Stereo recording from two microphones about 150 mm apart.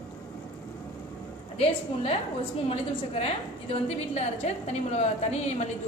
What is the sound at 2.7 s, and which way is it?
A woman's voice, 40° left (ahead or behind).